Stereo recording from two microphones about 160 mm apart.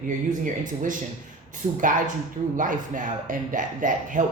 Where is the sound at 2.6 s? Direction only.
55° right (ahead or behind).